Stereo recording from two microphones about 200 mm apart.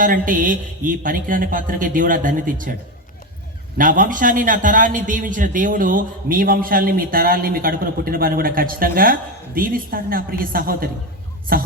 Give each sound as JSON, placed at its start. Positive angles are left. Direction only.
{"t": 0.0, "sound": "a man's voice", "side_deg": -45}
{"t": 3.8, "sound": "a man's voice", "side_deg": -45}